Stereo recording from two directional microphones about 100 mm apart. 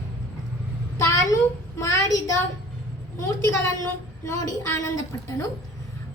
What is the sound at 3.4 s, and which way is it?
A woman's voice, 30° left (ahead or behind).